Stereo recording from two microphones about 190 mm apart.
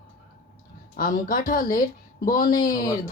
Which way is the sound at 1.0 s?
45° left (ahead or behind).